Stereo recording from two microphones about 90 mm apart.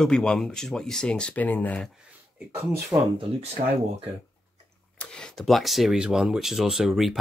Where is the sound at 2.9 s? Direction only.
70° right (ahead or behind).